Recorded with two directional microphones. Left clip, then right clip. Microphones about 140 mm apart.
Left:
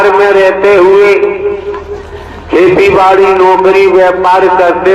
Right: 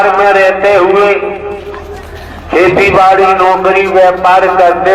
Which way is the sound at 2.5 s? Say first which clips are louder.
Left 1 dB; 15° left (ahead or behind).